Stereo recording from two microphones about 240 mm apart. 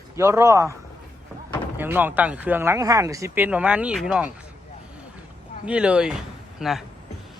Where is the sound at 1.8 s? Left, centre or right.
Centre.